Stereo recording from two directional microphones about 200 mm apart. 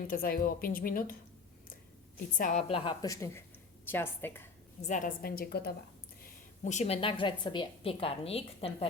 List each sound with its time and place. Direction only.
0.1 s speech: 45° left (ahead or behind)
2.4 s a woman's voice: 35° left (ahead or behind); by 4.4 s 10° left (ahead or behind)
4.8 s speech: 40° left (ahead or behind)
6.2 s a woman's voice: 35° left (ahead or behind)